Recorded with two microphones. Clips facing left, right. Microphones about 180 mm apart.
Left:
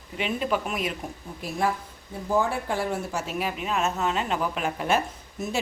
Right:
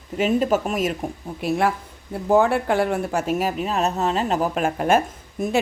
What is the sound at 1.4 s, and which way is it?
Speech, 65° right (ahead or behind).